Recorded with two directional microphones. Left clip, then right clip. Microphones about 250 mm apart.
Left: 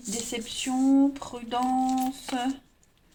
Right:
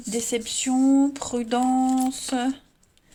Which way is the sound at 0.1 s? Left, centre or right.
Right.